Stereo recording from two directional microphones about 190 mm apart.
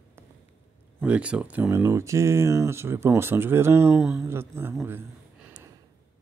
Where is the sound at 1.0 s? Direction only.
5° right (ahead or behind).